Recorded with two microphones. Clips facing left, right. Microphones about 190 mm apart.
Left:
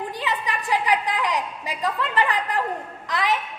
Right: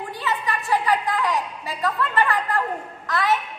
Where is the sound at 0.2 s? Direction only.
15° left (ahead or behind).